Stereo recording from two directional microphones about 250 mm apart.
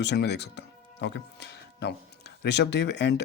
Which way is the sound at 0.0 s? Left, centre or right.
Left.